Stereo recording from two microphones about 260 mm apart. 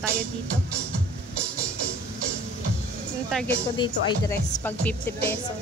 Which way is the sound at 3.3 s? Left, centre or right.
Centre.